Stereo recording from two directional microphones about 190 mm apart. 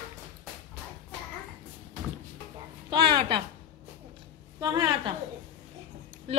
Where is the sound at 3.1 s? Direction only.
25° right (ahead or behind).